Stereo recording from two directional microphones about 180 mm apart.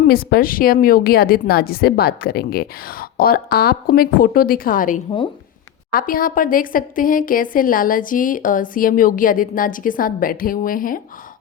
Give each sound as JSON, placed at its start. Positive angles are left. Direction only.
{"t": 0.0, "sound": "a woman's voice", "side_deg": 55}